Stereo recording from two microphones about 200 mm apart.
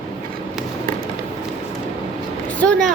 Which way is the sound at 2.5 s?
5° left (ahead or behind).